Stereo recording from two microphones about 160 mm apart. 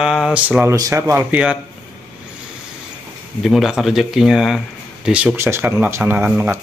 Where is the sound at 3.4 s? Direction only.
Centre (ahead or behind).